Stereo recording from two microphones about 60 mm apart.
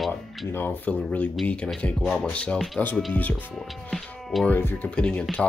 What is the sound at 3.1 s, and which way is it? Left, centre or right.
Speech, left.